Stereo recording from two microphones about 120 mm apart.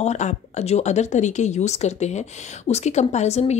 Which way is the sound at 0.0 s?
75° left (ahead or behind).